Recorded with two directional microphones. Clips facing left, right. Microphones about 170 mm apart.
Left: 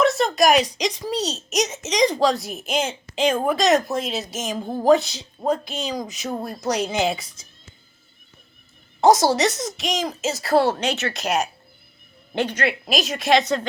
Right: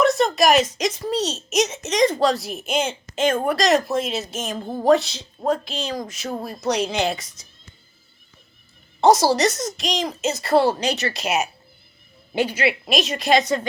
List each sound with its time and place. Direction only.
0.0 s a sound: centre (ahead or behind)
0.8 s a woman's voice: 5° right (ahead or behind)
9.0 s a woman's voice: centre (ahead or behind)